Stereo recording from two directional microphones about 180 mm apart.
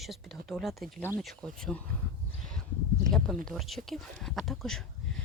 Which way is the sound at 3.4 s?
Centre (ahead or behind).